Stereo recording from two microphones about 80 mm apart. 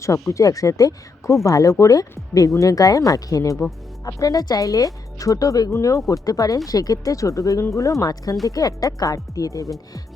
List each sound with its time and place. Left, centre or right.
0.0 s speech: left